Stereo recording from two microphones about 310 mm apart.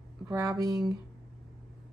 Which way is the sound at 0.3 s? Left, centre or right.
Centre.